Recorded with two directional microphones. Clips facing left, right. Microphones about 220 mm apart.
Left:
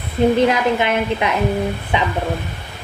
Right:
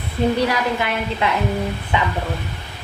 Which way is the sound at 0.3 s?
20° left (ahead or behind).